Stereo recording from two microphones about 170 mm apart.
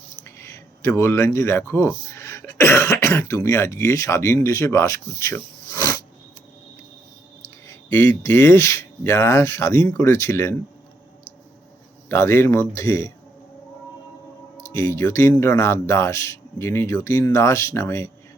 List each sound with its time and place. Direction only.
0.3 s speech: 15° left (ahead or behind)
7.4 s speech: 15° left (ahead or behind)
12.0 s speech: 15° left (ahead or behind)
14.6 s speech: 15° left (ahead or behind)